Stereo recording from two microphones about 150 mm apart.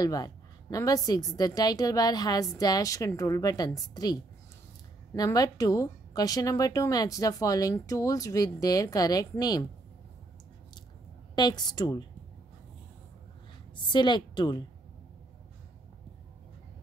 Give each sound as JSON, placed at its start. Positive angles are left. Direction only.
{"t": 0.0, "sound": "speech", "side_deg": 25}
{"t": 11.3, "sound": "speech", "side_deg": 30}
{"t": 13.9, "sound": "a woman's voice", "side_deg": 30}